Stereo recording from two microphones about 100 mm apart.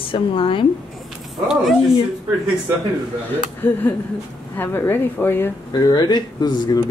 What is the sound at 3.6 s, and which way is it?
Speech, 20° left (ahead or behind).